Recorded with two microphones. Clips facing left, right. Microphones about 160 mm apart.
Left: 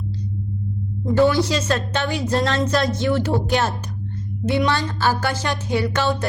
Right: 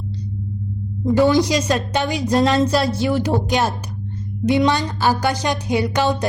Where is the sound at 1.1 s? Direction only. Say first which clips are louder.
Right 2 dB; 15° right (ahead or behind).